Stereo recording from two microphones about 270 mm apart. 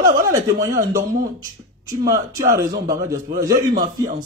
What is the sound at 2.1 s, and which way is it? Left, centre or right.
A man's voice, centre.